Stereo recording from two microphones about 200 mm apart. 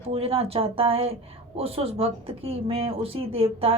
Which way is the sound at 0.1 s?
30° right (ahead or behind).